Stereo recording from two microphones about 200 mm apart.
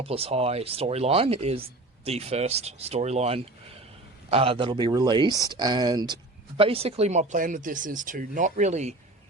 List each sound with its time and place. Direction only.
0.0 s chopping: 30° right (ahead or behind)
4.3 s speech: 30° right (ahead or behind)
6.6 s chopping: 30° right (ahead or behind)